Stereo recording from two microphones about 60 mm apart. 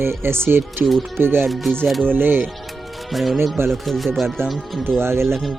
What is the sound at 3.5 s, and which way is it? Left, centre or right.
Speech, right.